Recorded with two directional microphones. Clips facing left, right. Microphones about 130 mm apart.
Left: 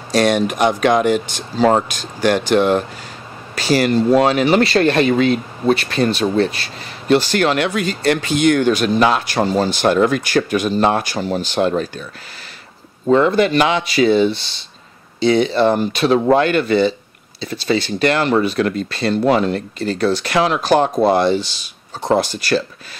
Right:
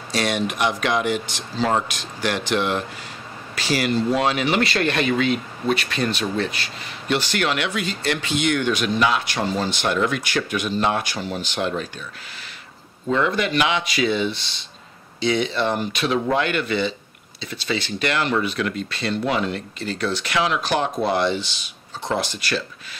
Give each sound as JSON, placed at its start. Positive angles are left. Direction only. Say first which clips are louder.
{"t": 0.1, "sound": "speech", "louder": "left 8 dB", "side_deg": 45}
{"t": 13.0, "sound": "speech", "louder": "left 8 dB", "side_deg": 35}